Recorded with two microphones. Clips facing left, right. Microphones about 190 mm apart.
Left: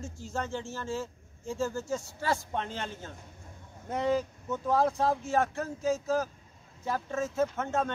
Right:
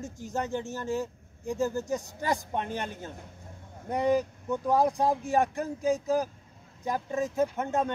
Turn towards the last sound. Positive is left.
turn(degrees=-15)  # may be behind; listen again after turning